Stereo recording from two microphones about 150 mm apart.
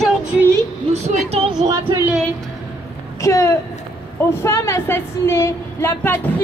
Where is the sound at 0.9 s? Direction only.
45° right (ahead or behind).